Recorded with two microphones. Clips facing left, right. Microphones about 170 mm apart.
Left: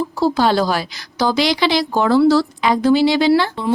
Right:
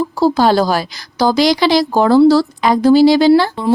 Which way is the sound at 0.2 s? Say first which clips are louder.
Right 4 dB; 40° right (ahead or behind).